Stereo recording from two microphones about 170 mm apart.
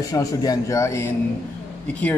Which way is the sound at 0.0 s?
20° left (ahead or behind).